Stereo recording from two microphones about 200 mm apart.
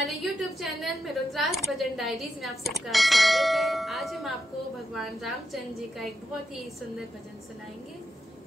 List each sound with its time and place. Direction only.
0.0 s a woman's voice: centre (ahead or behind)